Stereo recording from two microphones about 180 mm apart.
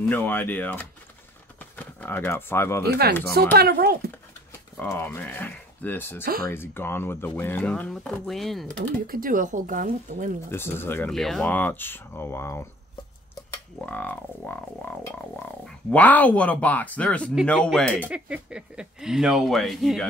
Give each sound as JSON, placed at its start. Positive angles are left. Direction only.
{"t": 0.0, "sound": "speech", "side_deg": 10}
{"t": 3.5, "sound": "speech", "side_deg": -60}
{"t": 4.7, "sound": "speech", "side_deg": 10}
{"t": 6.2, "sound": "speech", "side_deg": -55}
{"t": 6.5, "sound": "speech", "side_deg": 10}
{"t": 9.0, "sound": "speech", "side_deg": -50}
{"t": 10.5, "sound": "speech", "side_deg": 10}
{"t": 11.1, "sound": "speech", "side_deg": 0}
{"t": 13.7, "sound": "speech", "side_deg": 10}
{"t": 18.1, "sound": "speech", "side_deg": -5}